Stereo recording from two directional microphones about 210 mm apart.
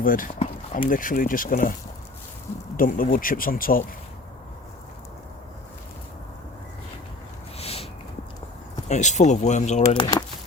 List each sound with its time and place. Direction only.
0.0 s speech: 40° left (ahead or behind)
2.7 s speech: 40° left (ahead or behind)
7.6 s a sound: 30° left (ahead or behind)
8.9 s speech: 35° left (ahead or behind)
10.0 s speech: 20° left (ahead or behind)